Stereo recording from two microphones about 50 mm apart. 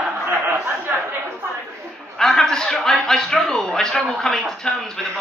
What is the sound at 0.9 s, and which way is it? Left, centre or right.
Chatter, right.